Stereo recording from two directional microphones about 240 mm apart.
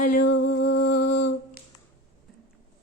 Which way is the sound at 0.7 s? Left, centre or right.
Left.